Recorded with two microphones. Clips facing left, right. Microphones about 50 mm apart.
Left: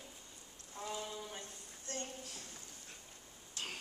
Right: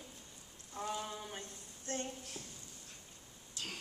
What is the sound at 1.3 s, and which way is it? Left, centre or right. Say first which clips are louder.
Speech: right 1 dB; right.